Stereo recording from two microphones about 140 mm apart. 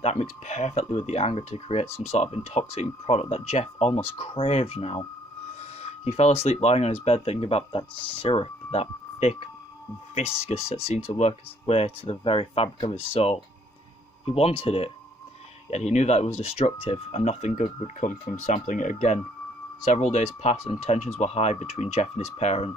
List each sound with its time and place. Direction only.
0.0 s speech: 50° left (ahead or behind)